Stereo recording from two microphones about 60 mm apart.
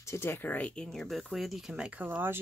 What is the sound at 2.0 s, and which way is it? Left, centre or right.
Speech, right.